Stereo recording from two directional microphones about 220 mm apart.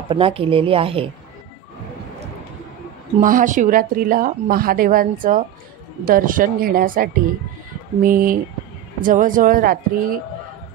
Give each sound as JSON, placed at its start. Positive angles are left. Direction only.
{"t": 0.1, "sound": "speech", "side_deg": -25}
{"t": 3.2, "sound": "speech", "side_deg": -35}